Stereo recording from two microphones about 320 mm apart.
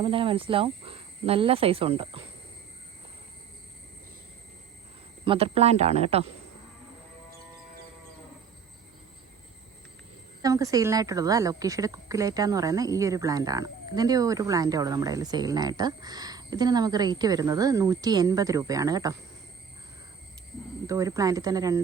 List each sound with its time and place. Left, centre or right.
0.0 s speech: centre
5.2 s speech: centre
10.4 s speech: centre
20.8 s speech: centre